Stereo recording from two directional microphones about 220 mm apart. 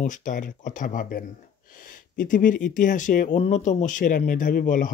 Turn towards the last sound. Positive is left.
turn(degrees=40)  # may be behind; listen again after turning